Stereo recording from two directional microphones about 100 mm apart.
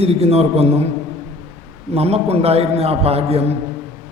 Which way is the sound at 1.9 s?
90° right.